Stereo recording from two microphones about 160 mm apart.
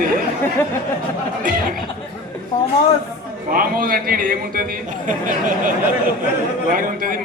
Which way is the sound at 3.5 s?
65° right (ahead or behind).